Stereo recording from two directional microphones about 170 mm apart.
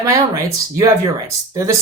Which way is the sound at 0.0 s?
20° right (ahead or behind).